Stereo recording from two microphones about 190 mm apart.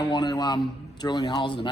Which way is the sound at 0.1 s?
20° left (ahead or behind).